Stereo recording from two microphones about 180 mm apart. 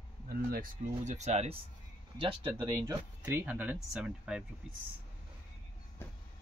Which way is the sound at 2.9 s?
15° right (ahead or behind).